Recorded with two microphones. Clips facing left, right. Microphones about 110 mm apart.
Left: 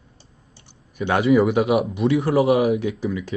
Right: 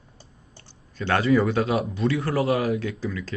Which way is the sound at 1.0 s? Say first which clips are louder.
Left 4 dB; 15° left (ahead or behind).